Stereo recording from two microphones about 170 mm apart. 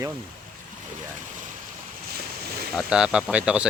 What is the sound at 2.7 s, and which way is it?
Speech, 5° right (ahead or behind).